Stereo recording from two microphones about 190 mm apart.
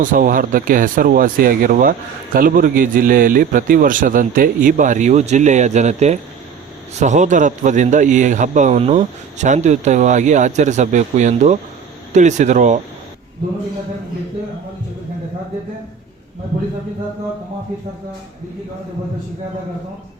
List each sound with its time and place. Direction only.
0.0 s a man's voice: 45° right (ahead or behind)